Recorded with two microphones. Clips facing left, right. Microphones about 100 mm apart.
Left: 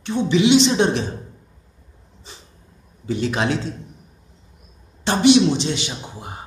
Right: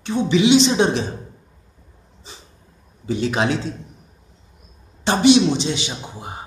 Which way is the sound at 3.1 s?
20° right (ahead or behind).